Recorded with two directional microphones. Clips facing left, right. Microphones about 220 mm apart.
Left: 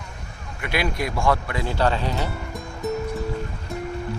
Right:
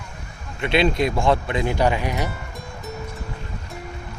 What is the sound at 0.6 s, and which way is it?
Speech, 25° right (ahead or behind).